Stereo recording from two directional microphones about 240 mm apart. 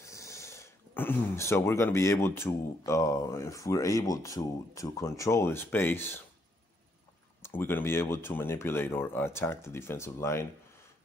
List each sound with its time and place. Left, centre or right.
0.0 s speech: centre
7.4 s speech: centre